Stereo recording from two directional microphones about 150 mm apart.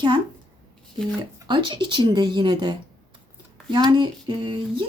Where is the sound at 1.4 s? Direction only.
35° right (ahead or behind).